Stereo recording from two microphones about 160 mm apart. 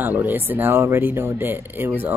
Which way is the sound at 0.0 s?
10° right (ahead or behind).